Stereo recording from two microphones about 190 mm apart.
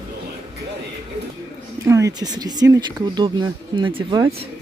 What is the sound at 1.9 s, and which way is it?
Speech, 15° right (ahead or behind).